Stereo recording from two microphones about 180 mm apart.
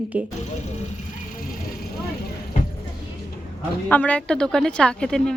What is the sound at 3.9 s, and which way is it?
A woman's voice, 5° left (ahead or behind).